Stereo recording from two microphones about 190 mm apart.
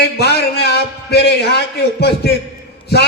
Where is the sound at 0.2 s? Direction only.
60° left (ahead or behind).